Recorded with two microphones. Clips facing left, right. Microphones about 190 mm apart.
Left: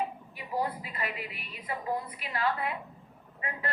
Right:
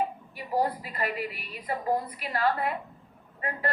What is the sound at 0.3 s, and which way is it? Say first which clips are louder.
Female singing: right 5 dB; 40° right (ahead or behind).